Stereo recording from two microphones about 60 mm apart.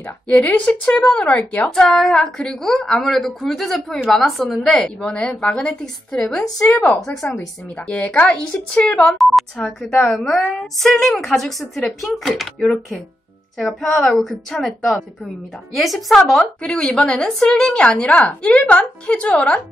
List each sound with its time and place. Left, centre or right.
0.5 s speech: left
1.8 s a woman's voice: centre
7.9 s speech: left
9.2 s a woman's voice: centre
16.6 s a woman's voice: centre